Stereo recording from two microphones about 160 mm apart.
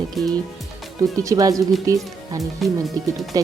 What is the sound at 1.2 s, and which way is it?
A woman's voice, 20° right (ahead or behind).